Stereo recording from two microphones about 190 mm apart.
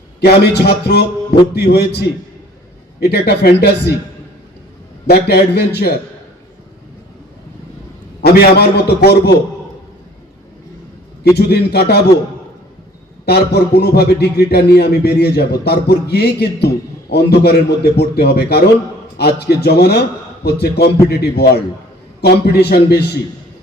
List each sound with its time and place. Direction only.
0.2 s a man's voice: 60° left (ahead or behind)
5.0 s a man's voice: 55° left (ahead or behind)
8.2 s a man's voice: 55° left (ahead or behind)
11.3 s a man's voice: 60° left (ahead or behind)
13.2 s a man's voice: 60° left (ahead or behind)